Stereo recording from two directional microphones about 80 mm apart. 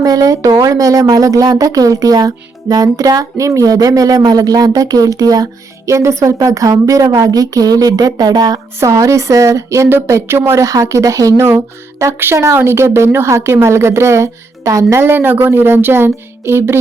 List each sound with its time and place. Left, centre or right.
0.0 s speech: right
8.8 s speech: right